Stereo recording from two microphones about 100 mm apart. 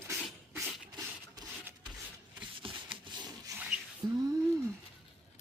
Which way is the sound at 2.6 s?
55° right (ahead or behind).